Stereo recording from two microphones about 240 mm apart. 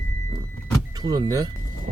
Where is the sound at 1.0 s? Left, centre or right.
Centre.